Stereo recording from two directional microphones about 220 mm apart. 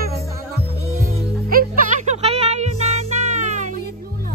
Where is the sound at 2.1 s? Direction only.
30° right (ahead or behind).